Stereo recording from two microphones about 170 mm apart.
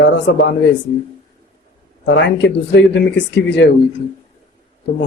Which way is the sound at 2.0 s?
90° left.